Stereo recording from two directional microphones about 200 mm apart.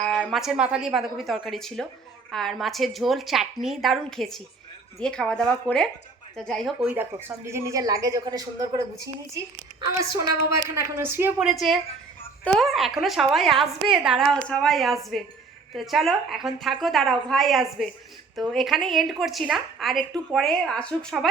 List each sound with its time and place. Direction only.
0.0 s a woman's voice: centre (ahead or behind); by 8.8 s 20° right (ahead or behind)
10.5 s a woman's voice: 15° right (ahead or behind); by 21.2 s centre (ahead or behind)